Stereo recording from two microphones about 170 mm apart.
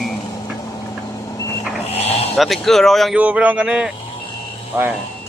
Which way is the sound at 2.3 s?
Centre (ahead or behind).